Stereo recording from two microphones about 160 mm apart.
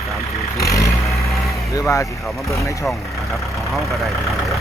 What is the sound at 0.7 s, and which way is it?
Vehicle, 20° left (ahead or behind).